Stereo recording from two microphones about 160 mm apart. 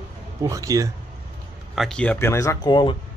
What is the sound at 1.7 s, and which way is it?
Speech, centre (ahead or behind).